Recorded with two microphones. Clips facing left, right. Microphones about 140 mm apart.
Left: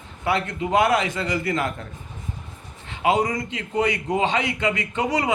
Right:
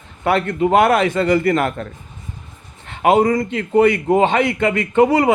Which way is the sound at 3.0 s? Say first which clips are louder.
Right 7 dB; 55° right (ahead or behind).